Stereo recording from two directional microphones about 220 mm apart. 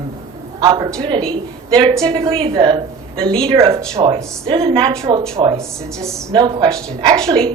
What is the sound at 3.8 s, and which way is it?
A woman's voice, 20° right (ahead or behind).